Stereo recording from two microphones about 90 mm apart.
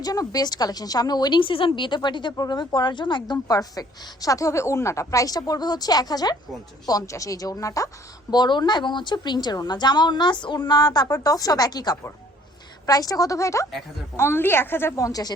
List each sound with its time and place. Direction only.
0.0 s a woman's voice: 45° left (ahead or behind); by 3.3 s 60° left (ahead or behind)
3.3 s a woman's voice: 45° left (ahead or behind)
8.3 s a woman's voice: 55° left (ahead or behind); by 14.9 s 25° left (ahead or behind)
14.9 s a woman's voice: 40° left (ahead or behind)